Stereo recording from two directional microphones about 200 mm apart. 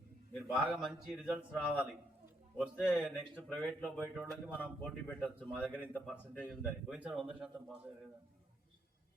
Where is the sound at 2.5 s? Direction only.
5° right (ahead or behind).